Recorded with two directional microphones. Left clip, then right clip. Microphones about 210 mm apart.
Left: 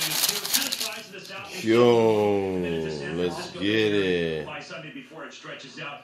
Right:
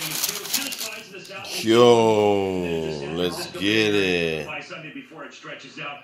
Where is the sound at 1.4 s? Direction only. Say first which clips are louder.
Right 4 dB; 10° right (ahead or behind).